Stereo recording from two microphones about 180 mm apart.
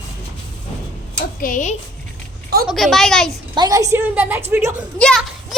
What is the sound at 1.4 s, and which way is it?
Speech, 45° left (ahead or behind).